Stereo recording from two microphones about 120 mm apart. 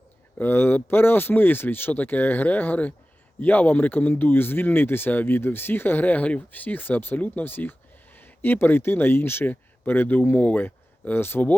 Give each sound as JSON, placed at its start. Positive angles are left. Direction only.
{"t": 0.3, "sound": "speech", "side_deg": 15}